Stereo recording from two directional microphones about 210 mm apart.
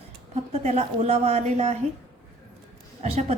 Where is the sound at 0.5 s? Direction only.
30° right (ahead or behind).